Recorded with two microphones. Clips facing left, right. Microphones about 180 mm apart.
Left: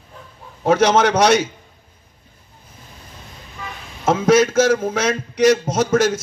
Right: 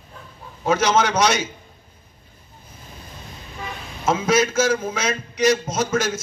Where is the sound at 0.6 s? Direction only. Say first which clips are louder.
Left 4 dB; 65° left (ahead or behind).